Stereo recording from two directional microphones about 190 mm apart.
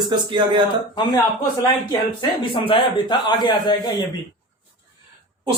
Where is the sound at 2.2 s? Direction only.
25° left (ahead or behind).